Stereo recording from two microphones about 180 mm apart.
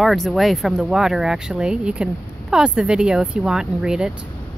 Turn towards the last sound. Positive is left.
turn(degrees=-5)  # may be behind; listen again after turning